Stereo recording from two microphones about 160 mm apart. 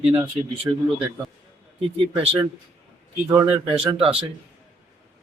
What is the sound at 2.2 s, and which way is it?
Speech, 35° right (ahead or behind).